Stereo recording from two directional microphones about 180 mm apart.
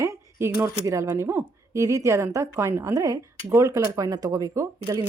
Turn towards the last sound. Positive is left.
turn(degrees=-15)  # may be behind; listen again after turning